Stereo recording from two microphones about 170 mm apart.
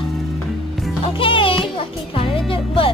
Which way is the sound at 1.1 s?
30° left (ahead or behind).